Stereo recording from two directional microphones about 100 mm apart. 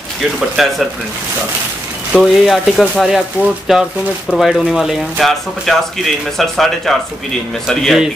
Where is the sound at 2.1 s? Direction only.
10° right (ahead or behind).